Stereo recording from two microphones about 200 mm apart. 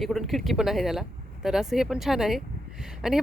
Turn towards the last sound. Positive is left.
turn(degrees=0)  # may be behind; listen again after turning